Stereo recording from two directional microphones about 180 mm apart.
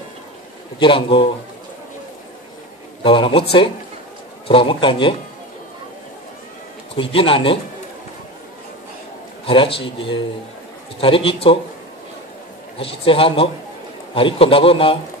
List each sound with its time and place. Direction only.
0.7 s a man's voice: 30° left (ahead or behind)
3.0 s a man's voice: 30° left (ahead or behind)
4.5 s a man's voice: 30° left (ahead or behind)
7.0 s a man's voice: 30° left (ahead or behind)
9.5 s a man's voice: 30° left (ahead or behind)
12.7 s a man's voice: 30° left (ahead or behind)